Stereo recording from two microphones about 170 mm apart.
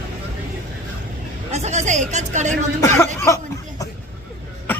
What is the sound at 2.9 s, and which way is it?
Speech, 15° left (ahead or behind).